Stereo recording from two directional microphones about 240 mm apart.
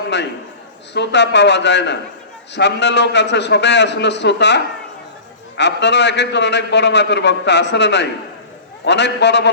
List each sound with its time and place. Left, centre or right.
0.9 s a man's voice: left